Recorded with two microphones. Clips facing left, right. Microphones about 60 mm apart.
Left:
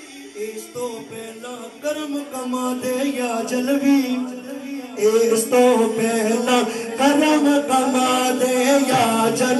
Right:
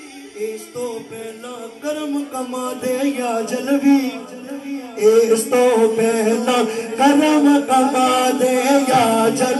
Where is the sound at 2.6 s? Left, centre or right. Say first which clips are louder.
Right 3 dB; right.